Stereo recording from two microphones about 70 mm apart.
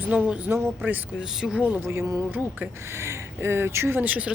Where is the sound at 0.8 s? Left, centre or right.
Right.